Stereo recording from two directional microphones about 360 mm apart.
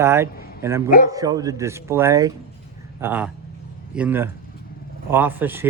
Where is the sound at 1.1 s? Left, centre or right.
Centre.